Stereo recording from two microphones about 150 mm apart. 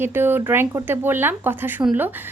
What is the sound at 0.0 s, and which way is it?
Speech, 15° right (ahead or behind).